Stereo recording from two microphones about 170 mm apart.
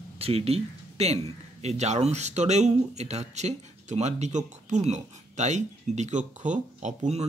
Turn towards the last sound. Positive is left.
turn(degrees=-40)  # may be behind; listen again after turning